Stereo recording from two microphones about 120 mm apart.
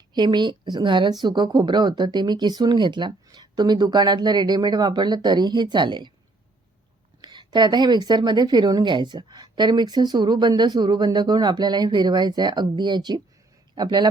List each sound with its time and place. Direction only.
0.1 s a woman's voice: 40° right (ahead or behind)
7.2 s a woman's voice: 40° right (ahead or behind)